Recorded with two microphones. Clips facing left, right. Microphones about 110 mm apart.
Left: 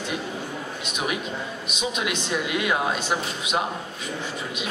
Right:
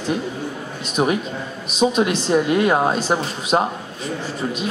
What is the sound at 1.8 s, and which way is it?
Speech, 35° right (ahead or behind).